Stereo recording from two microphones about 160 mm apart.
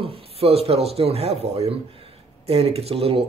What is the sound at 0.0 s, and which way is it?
A man's voice, 40° right (ahead or behind).